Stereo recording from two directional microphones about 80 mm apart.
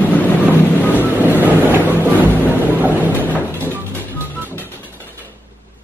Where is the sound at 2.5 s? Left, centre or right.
Right.